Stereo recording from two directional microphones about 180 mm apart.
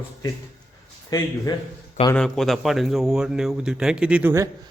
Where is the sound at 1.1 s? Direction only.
20° left (ahead or behind).